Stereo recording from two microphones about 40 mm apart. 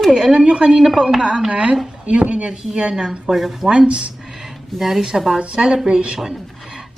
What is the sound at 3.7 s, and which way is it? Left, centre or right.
Speech, right.